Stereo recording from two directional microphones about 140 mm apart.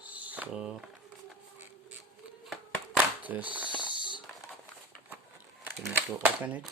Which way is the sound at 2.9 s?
10° right (ahead or behind).